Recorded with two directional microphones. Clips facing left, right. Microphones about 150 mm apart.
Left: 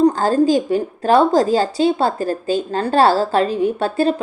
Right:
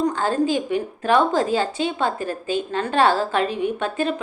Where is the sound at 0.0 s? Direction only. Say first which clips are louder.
Left 7 dB; 35° left (ahead or behind).